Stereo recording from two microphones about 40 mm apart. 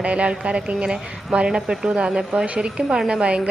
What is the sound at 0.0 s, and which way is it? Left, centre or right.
Speech, right.